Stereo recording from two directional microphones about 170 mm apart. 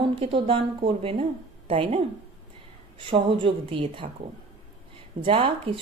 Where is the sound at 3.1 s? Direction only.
30° right (ahead or behind).